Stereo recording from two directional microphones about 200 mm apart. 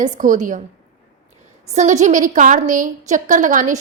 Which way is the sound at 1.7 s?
35° right (ahead or behind).